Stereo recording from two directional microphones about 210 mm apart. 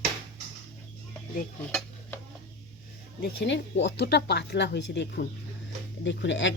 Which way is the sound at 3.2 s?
55° left (ahead or behind).